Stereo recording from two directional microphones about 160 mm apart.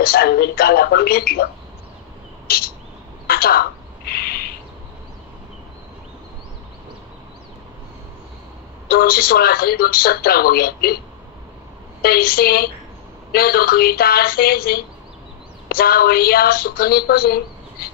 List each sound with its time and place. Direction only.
0.0 s a woman's voice: 70° left (ahead or behind)
2.4 s a sound: 70° left (ahead or behind)
3.3 s bird: 70° left (ahead or behind)
8.8 s a woman's voice: 70° left (ahead or behind)
12.0 s a woman's voice: 70° left (ahead or behind)